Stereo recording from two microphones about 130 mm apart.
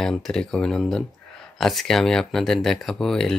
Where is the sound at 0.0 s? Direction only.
5° left (ahead or behind).